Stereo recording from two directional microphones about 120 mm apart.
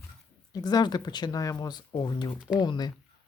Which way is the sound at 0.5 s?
35° left (ahead or behind).